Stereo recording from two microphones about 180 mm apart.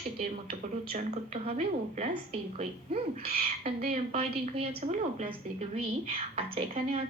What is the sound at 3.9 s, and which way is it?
A woman's voice, 35° right (ahead or behind).